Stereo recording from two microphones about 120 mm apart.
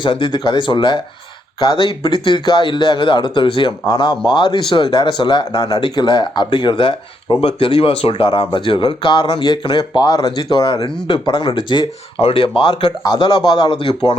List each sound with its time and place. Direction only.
0.0 s speech: 40° left (ahead or behind)